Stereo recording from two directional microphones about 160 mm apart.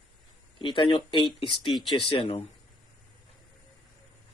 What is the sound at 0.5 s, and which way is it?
Speech, 30° left (ahead or behind).